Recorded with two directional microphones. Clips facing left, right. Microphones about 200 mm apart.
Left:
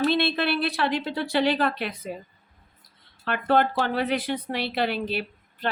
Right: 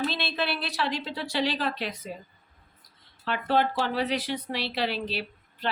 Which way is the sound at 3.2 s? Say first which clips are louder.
Left 3 dB; 55° left (ahead or behind).